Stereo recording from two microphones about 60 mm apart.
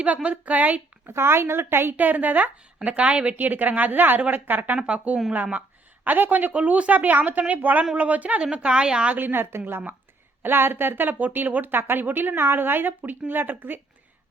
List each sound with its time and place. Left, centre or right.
0.0 s a woman's voice: right
1.0 s a woman's voice: right; by 9.1 s centre
9.1 s speech: right